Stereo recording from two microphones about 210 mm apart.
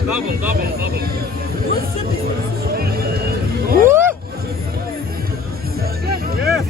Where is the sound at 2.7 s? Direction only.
45° right (ahead or behind).